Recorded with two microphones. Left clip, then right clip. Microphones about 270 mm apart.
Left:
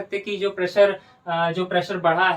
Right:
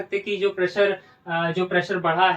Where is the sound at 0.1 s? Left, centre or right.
Centre.